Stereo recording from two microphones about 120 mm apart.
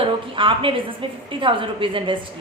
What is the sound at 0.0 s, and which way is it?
A woman's voice, 45° right (ahead or behind).